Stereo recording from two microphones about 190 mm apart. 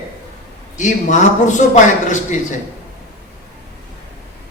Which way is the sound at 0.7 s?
40° left (ahead or behind).